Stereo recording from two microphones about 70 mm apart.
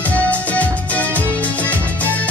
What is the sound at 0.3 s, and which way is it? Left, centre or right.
Music, left.